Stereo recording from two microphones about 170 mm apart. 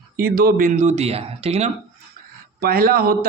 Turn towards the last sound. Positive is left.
turn(degrees=-60)  # may be behind; listen again after turning